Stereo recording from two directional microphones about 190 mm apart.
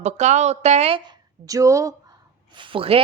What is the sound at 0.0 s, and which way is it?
Speech, 40° right (ahead or behind).